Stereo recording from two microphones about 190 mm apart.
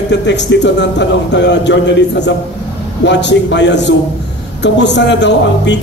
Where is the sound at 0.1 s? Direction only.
70° left (ahead or behind).